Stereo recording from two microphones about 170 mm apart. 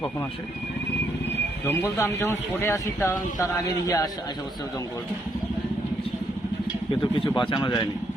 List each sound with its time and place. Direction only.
1.6 s speech: 15° left (ahead or behind)
6.9 s speech: 30° left (ahead or behind)